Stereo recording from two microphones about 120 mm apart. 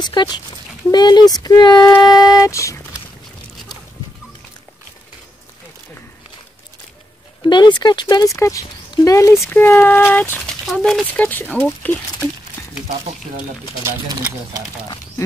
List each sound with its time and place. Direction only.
0.0 s speech: 40° left (ahead or behind)
7.4 s speech: 40° left (ahead or behind)
8.4 s speech: 25° left (ahead or behind)
10.6 s speech: 5° left (ahead or behind)